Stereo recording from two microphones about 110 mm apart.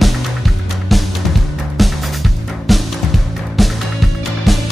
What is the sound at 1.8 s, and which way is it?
Music, centre (ahead or behind).